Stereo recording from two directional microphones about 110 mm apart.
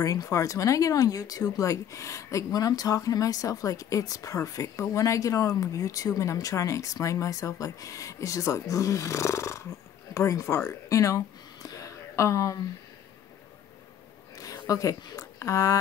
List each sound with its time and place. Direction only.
0.0 s speech: 30° left (ahead or behind)
14.3 s speech: 30° left (ahead or behind)